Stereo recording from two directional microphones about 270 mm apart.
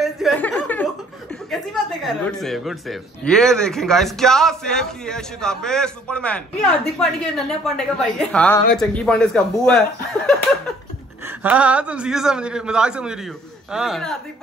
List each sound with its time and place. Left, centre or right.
0.0 s chuckle: centre
1.5 s a man's voice: centre